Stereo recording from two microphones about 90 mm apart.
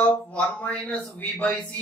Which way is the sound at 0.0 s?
10° left (ahead or behind).